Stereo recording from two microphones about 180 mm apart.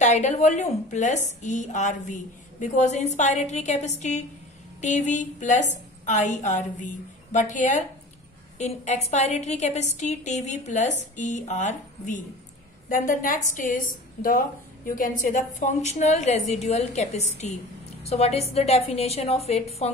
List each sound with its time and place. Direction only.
0.0 s a woman's voice: 40° left (ahead or behind)